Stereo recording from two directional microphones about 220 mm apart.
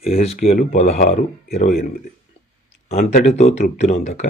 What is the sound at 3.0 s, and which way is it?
Speech, 35° left (ahead or behind).